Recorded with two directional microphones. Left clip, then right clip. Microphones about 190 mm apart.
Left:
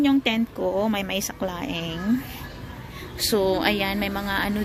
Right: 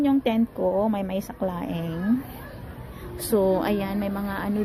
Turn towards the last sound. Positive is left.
turn(degrees=0)  # may be behind; listen again after turning